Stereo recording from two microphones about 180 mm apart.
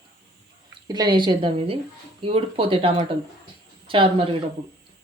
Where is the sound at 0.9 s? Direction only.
20° right (ahead or behind).